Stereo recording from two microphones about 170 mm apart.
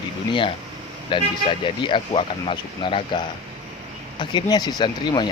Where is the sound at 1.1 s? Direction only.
30° left (ahead or behind).